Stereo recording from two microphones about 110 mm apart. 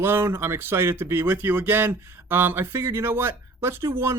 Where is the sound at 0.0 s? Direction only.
25° right (ahead or behind).